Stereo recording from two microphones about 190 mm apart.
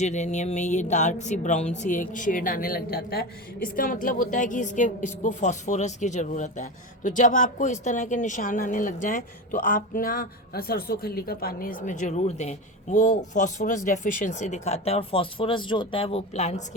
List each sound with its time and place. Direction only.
0.0 s speech: 40° left (ahead or behind)